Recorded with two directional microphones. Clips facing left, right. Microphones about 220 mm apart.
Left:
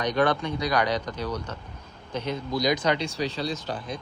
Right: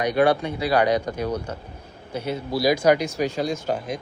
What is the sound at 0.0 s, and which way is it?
A man's voice, 10° right (ahead or behind).